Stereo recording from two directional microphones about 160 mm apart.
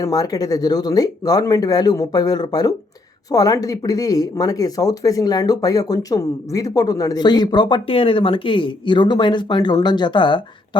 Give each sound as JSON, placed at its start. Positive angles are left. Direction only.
{"t": 0.0, "sound": "speech", "side_deg": 25}